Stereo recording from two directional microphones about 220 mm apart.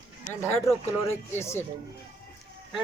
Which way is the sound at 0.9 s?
10° left (ahead or behind).